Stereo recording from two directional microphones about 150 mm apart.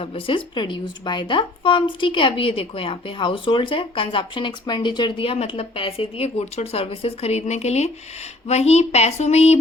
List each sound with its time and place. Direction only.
0.0 s speech: 35° left (ahead or behind)